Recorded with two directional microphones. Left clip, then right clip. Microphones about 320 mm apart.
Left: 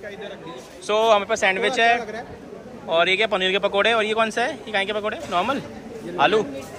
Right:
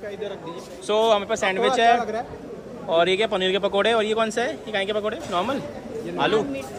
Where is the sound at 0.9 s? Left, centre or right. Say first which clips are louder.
Left 2 dB; centre.